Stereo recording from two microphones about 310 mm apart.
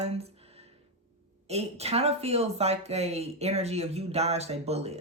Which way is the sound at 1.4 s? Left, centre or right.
Centre.